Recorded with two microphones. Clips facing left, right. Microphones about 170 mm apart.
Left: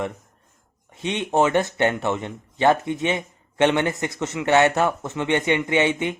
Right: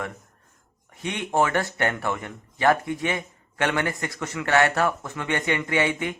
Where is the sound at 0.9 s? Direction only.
20° left (ahead or behind).